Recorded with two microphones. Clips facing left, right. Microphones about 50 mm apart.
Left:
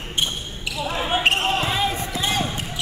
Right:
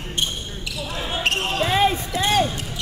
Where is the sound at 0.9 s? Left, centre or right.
Left.